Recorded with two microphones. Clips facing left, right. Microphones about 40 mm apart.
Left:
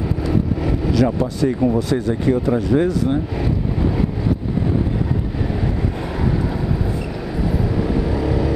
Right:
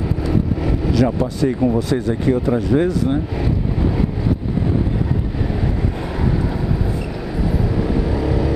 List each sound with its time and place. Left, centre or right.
0.3 s vehicle: right
1.8 s speech: centre
7.9 s vehicle: centre